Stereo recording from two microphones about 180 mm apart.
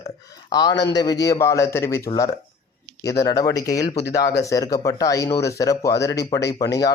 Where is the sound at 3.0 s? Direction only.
15° left (ahead or behind).